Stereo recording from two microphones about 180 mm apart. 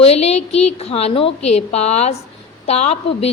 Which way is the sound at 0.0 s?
35° left (ahead or behind).